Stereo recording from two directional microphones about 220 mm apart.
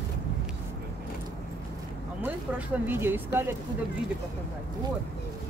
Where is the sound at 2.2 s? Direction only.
5° right (ahead or behind).